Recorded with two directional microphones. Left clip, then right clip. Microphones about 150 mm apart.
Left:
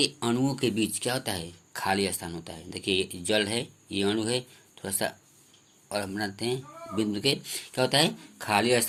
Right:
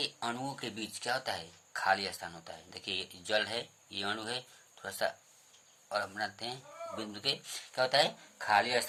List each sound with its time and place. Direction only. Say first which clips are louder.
0.0 s speech: left 9 dB; 15° left (ahead or behind)